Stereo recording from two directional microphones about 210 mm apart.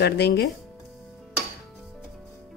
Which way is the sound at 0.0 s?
50° left (ahead or behind).